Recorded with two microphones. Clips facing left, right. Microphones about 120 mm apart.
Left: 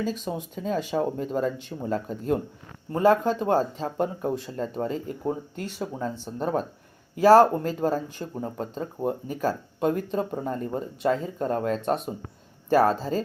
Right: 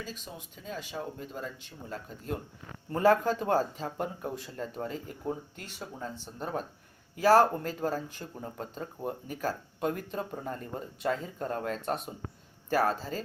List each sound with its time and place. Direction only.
0.3 s speech: 60° left (ahead or behind)
2.9 s speech: 20° left (ahead or behind)